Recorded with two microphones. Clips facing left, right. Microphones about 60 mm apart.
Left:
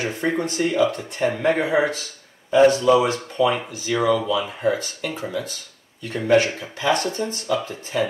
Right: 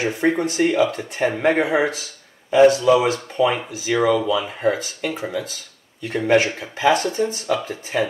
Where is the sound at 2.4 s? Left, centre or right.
Centre.